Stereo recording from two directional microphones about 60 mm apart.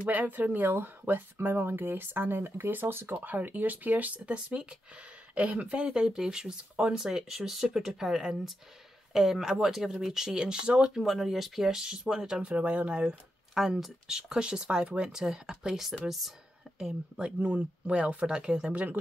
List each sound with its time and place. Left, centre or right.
0.1 s speech: right; by 11.0 s centre
11.0 s speech: centre; by 13.2 s right
13.6 s speech: centre
16.7 s speech: centre
18.7 s speech: right